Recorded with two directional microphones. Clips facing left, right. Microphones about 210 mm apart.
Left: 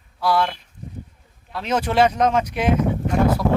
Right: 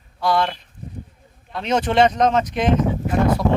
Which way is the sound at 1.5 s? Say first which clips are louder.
Right 2 dB; 5° left (ahead or behind).